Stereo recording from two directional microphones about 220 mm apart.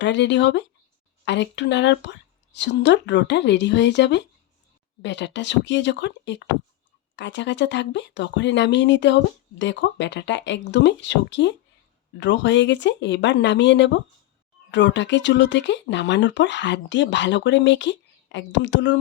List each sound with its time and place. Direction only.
0.0 s speech: 55° left (ahead or behind)